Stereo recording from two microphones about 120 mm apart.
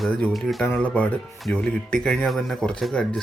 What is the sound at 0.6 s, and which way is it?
Speech, 10° left (ahead or behind).